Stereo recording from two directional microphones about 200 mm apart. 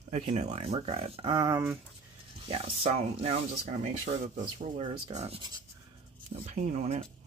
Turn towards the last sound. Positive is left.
turn(degrees=-35)  # may be behind; listen again after turning